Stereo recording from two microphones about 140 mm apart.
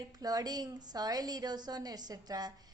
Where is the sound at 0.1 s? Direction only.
25° right (ahead or behind).